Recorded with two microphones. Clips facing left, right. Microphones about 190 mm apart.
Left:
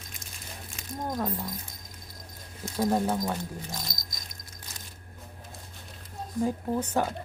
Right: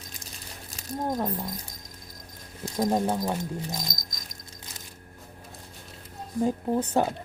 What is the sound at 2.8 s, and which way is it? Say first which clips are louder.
Speech: right 1 dB; 15° right (ahead or behind).